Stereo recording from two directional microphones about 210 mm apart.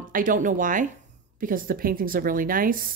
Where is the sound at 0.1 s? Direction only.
40° right (ahead or behind).